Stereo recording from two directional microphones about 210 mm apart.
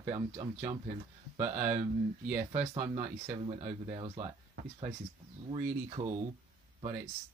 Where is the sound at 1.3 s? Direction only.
30° right (ahead or behind).